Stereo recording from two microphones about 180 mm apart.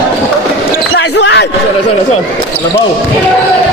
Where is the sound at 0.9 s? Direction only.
85° left.